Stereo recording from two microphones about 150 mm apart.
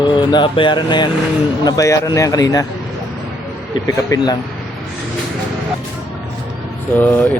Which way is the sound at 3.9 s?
20° left (ahead or behind).